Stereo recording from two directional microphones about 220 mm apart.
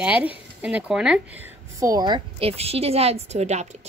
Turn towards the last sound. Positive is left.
turn(degrees=-30)  # may be behind; listen again after turning